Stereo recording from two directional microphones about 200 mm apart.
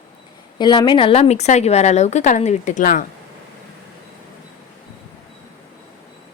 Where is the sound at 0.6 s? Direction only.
20° left (ahead or behind); by 3.1 s 40° left (ahead or behind).